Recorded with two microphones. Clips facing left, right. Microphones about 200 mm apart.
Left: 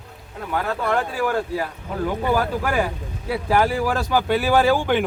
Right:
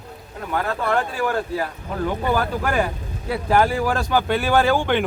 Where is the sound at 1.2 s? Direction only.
10° left (ahead or behind).